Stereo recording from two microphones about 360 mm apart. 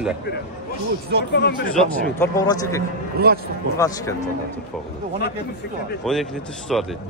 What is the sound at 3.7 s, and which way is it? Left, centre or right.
Speech, centre.